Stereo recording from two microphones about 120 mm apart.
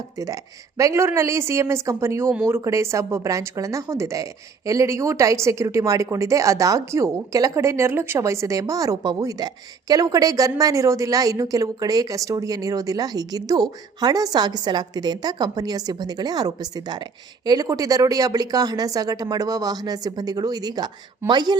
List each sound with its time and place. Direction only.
0.8 s a woman's voice: 25° right (ahead or behind)